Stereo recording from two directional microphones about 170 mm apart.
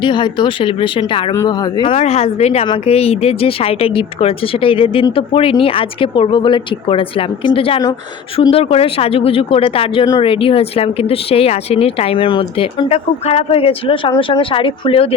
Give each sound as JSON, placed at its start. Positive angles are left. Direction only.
{"t": 0.0, "sound": "speech", "side_deg": 30}
{"t": 2.0, "sound": "speech", "side_deg": 40}